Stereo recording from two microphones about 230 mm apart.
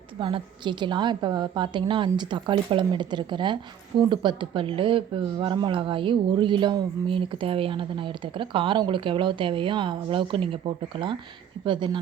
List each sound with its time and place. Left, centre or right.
0.2 s speech: right